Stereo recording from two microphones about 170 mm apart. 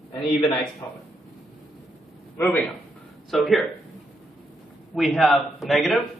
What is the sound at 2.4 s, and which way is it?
A man's voice, 10° left (ahead or behind).